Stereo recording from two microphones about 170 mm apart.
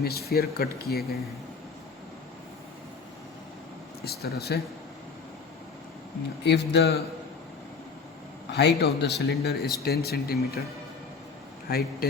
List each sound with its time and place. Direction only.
0.0 s speech: 65° left (ahead or behind)
4.0 s speech: 65° left (ahead or behind)
6.4 s a man's voice: 90° left
8.4 s speech: 80° left
11.7 s speech: 60° left (ahead or behind)